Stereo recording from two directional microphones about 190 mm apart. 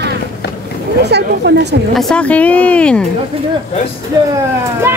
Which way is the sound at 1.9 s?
5° left (ahead or behind).